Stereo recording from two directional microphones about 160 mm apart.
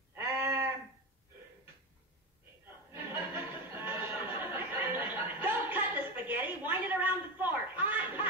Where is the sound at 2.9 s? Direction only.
15° right (ahead or behind).